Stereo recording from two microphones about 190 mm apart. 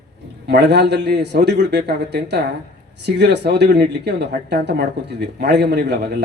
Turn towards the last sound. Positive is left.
turn(degrees=-60)  # may be behind; listen again after turning